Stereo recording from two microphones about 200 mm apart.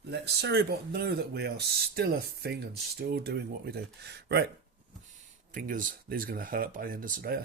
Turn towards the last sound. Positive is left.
turn(degrees=-45)  # may be behind; listen again after turning